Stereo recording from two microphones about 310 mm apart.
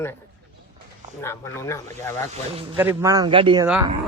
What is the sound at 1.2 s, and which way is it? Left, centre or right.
Speech, centre.